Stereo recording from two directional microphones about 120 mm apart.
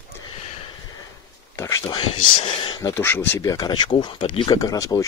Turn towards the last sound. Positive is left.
turn(degrees=30)  # may be behind; listen again after turning